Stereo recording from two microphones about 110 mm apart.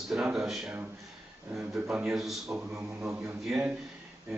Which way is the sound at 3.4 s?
10° right (ahead or behind).